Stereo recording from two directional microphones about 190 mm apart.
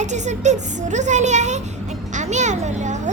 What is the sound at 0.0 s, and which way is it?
A child's voice, 40° right (ahead or behind).